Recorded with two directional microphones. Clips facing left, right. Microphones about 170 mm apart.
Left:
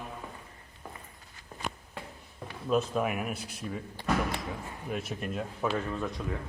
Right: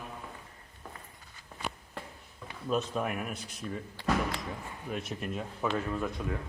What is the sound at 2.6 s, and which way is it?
Speech, centre (ahead or behind).